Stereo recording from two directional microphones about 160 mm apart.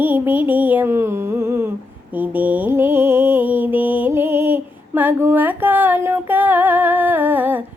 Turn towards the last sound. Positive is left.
turn(degrees=-10)  # may be behind; listen again after turning